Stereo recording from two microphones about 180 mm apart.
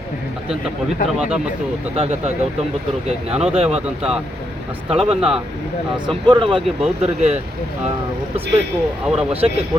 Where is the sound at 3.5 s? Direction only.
35° right (ahead or behind).